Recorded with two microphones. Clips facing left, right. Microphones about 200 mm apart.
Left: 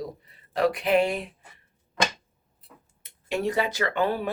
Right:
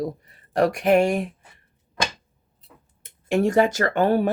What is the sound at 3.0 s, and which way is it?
Speech, 50° right (ahead or behind).